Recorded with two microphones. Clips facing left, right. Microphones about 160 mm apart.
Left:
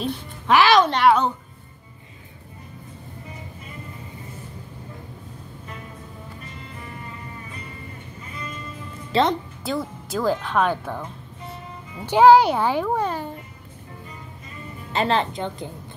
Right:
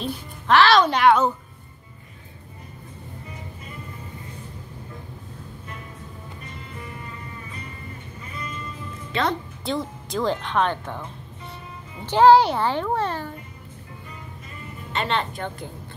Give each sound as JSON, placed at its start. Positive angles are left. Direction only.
{"t": 0.0, "sound": "a woman's voice", "side_deg": 10}
{"t": 0.8, "sound": "a woman's voice", "side_deg": 0}
{"t": 9.1, "sound": "a woman's voice", "side_deg": 30}
{"t": 9.7, "sound": "speech", "side_deg": 5}
{"t": 12.1, "sound": "speech", "side_deg": 10}
{"t": 14.9, "sound": "speech", "side_deg": 35}
{"t": 15.3, "sound": "speech", "side_deg": 20}